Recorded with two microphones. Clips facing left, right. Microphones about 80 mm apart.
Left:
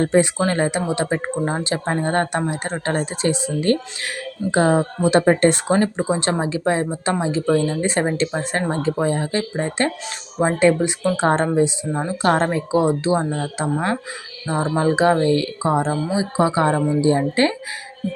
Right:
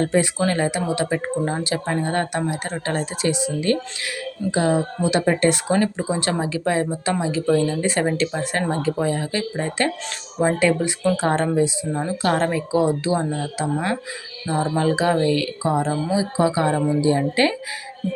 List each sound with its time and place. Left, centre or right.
0.0 s speech: left